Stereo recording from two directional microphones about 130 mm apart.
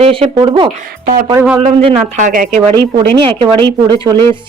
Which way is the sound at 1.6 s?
50° right (ahead or behind).